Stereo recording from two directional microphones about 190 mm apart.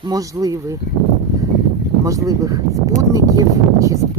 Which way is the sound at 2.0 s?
15° right (ahead or behind).